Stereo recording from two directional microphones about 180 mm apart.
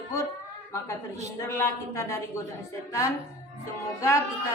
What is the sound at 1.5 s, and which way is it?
Speech, 15° left (ahead or behind).